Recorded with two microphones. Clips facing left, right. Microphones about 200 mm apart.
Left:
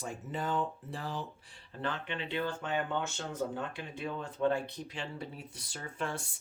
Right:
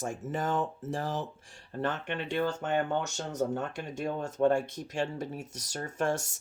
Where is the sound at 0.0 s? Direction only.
45° right (ahead or behind).